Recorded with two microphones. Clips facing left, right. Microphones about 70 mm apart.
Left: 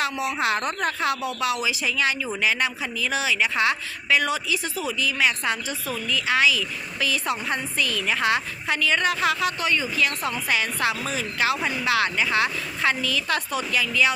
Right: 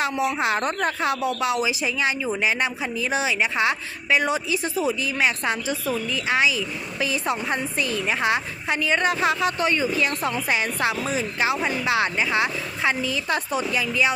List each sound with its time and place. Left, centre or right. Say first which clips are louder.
0.0 s a woman's voice: right 2 dB; right